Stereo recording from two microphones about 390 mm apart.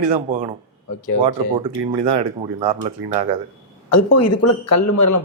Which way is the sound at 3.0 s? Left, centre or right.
Right.